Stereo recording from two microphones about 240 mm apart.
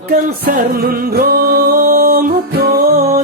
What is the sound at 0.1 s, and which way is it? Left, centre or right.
Music, right.